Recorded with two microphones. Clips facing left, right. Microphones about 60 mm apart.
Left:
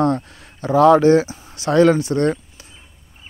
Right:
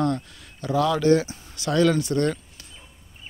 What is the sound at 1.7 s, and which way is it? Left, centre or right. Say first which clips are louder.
Speech: left 6 dB; left.